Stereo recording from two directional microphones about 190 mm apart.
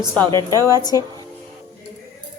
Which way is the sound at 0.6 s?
20° left (ahead or behind).